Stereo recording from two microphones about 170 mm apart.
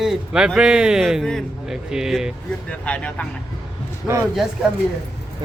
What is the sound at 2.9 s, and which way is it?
Speech, 10° left (ahead or behind).